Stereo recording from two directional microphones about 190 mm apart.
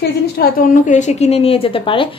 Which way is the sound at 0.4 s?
40° left (ahead or behind).